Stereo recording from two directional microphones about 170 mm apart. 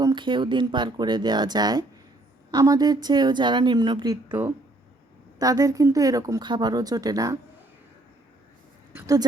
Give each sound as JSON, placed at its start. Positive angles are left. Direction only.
{"t": 0.0, "sound": "speech", "side_deg": -25}
{"t": 5.4, "sound": "speech", "side_deg": -20}
{"t": 8.9, "sound": "a sound", "side_deg": -15}